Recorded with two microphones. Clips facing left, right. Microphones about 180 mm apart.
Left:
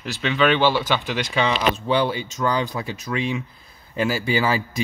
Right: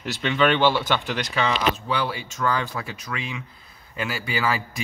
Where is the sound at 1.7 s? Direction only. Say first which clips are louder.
Left 5 dB; 25° left (ahead or behind).